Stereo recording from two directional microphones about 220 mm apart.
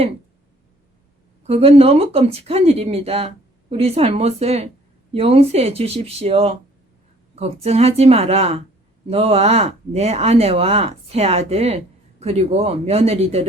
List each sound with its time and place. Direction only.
1.5 s speech: 25° right (ahead or behind)